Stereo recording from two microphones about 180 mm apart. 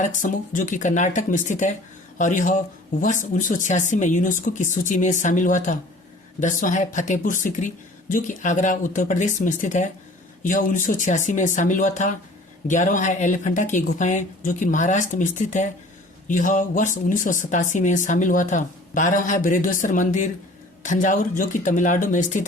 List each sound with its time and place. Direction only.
0.0 s speech: 45° left (ahead or behind)